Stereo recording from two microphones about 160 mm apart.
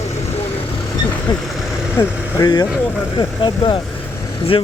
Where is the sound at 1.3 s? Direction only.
25° left (ahead or behind).